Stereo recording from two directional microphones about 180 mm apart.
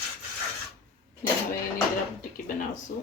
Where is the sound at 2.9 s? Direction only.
50° left (ahead or behind).